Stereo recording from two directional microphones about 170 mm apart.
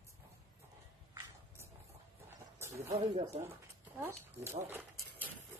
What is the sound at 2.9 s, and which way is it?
Speech, 40° right (ahead or behind).